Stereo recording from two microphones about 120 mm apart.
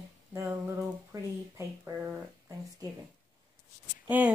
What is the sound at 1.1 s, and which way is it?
Speech, 30° right (ahead or behind).